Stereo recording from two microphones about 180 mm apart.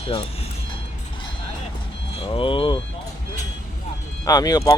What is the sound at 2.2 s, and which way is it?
Speech, 30° left (ahead or behind).